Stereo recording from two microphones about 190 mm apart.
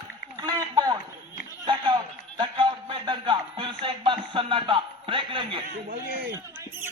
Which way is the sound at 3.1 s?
25° right (ahead or behind).